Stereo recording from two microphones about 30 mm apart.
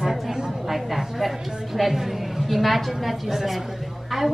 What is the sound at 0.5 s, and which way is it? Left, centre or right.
A woman's voice, centre.